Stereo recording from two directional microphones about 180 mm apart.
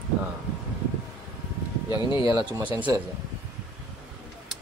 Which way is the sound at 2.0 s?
25° left (ahead or behind).